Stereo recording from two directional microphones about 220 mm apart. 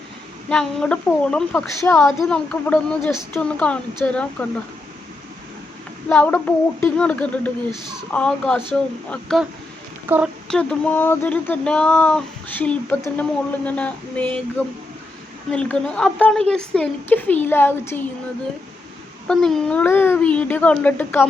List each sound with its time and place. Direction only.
0.4 s speech: 5° left (ahead or behind)
6.1 s speech: 5° left (ahead or behind)
10.1 s speech: 10° right (ahead or behind)
10.5 s speech: 5° left (ahead or behind)
15.5 s speech: 5° left (ahead or behind)
19.3 s speech: centre (ahead or behind)